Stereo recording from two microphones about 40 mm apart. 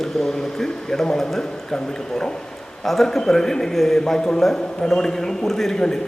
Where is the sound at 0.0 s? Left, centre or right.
Centre.